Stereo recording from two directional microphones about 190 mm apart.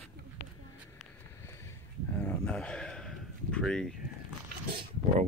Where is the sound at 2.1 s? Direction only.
5° left (ahead or behind).